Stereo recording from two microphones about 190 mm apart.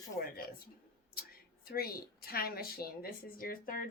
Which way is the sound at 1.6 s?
55° left (ahead or behind).